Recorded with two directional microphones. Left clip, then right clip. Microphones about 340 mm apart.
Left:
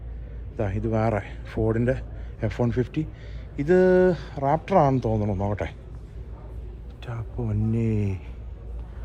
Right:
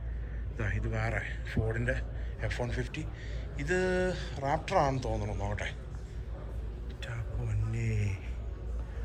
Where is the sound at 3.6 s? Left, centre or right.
Centre.